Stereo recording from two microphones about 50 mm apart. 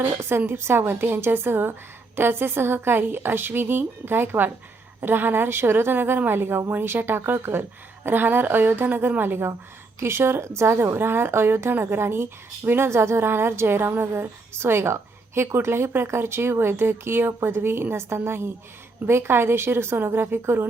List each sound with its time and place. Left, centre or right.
0.2 s a woman's voice: right
8.0 s a woman's voice: right
10.0 s a woman's voice: right
12.9 s a woman's voice: right